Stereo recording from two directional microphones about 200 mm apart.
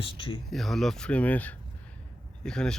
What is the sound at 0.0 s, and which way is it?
Speech, 25° left (ahead or behind).